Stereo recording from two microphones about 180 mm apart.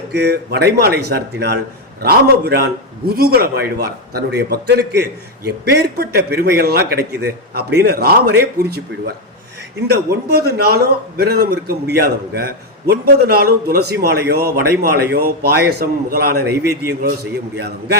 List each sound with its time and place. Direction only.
0.1 s a man's voice: 65° right (ahead or behind)